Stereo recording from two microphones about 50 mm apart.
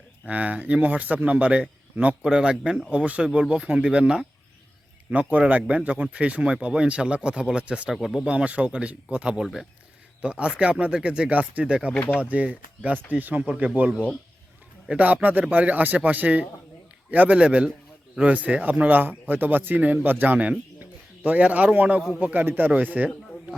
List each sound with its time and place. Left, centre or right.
0.3 s speech: right
5.5 s speech: right
9.4 s speech: centre
10.2 s speech: right
11.6 s speech: centre